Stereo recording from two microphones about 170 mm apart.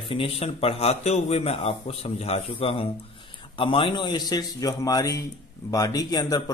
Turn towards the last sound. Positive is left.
turn(degrees=20)  # may be behind; listen again after turning